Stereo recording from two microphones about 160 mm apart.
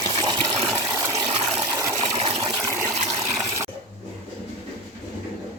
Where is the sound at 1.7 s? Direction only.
20° right (ahead or behind).